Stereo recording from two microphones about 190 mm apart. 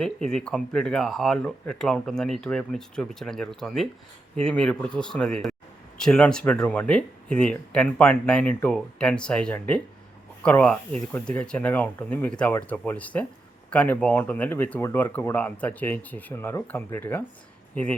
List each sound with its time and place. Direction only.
0.0 s speech: 5° left (ahead or behind)